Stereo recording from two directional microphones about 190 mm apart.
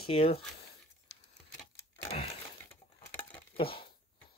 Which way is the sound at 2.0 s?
30° left (ahead or behind).